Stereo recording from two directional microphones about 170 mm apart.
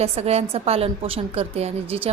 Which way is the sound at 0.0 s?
40° right (ahead or behind).